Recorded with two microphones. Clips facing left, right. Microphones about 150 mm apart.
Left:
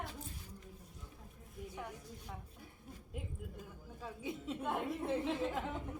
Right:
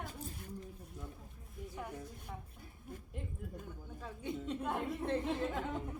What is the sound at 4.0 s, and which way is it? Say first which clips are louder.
A woman's voice: right 2 dB; 5° left (ahead or behind).